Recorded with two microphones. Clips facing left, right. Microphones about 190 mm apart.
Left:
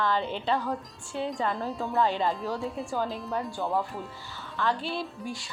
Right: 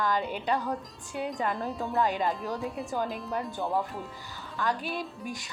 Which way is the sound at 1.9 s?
15° right (ahead or behind).